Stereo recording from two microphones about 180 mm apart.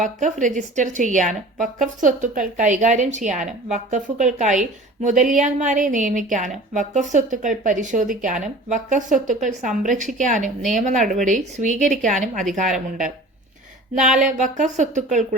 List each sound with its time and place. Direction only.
0.0 s a woman's voice: 45° right (ahead or behind)
14.6 s a woman's voice: 40° right (ahead or behind)